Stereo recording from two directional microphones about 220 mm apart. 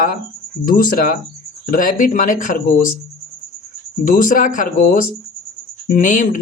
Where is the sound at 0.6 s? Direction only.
40° left (ahead or behind).